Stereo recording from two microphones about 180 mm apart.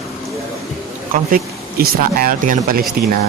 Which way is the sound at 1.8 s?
55° right (ahead or behind).